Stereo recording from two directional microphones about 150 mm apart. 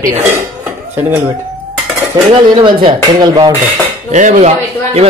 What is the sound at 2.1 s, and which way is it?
Speech, 30° right (ahead or behind).